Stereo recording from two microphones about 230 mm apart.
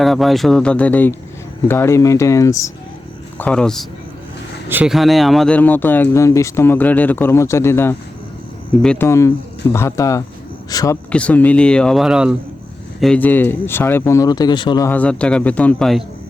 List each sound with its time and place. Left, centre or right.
0.0 s speech: centre
11.1 s speech: centre